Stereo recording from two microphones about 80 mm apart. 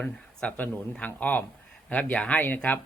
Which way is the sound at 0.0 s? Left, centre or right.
Centre.